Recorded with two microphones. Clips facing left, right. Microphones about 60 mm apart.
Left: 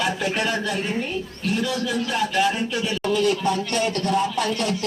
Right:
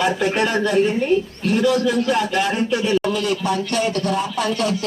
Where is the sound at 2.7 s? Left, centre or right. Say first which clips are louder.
Right 6 dB; right.